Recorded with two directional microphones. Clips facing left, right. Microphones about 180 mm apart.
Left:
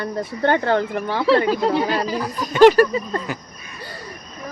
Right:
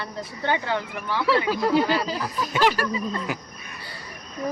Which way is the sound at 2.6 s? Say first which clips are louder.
Left 12 dB; 50° left (ahead or behind).